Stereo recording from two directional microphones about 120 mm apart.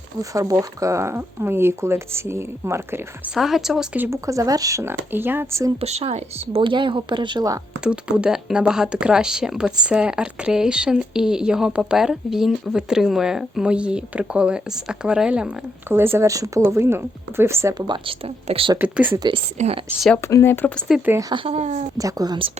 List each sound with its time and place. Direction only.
0.2 s speech: 30° right (ahead or behind)
3.2 s a woman's voice: 5° right (ahead or behind)
3.9 s a woman's voice: 15° right (ahead or behind)
4.3 s speech: 30° right (ahead or behind)
5.8 s speech: 60° right (ahead or behind); by 7.6 s 35° right (ahead or behind)
7.9 s a woman's voice: 10° right (ahead or behind)
17.7 s speech: 40° right (ahead or behind)
18.8 s a woman's voice: 15° right (ahead or behind)
19.6 s speech: 90° right
20.2 s speech: 20° left (ahead or behind)
20.7 s a woman's voice: centre (ahead or behind)
21.3 s speech: 55° right (ahead or behind); by 21.8 s 75° right (ahead or behind)
21.9 s speech: 30° right (ahead or behind)